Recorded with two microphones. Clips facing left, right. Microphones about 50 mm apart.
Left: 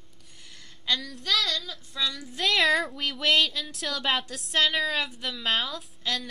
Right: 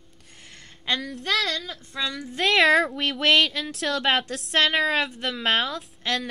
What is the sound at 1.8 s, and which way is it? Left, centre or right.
Speech, right.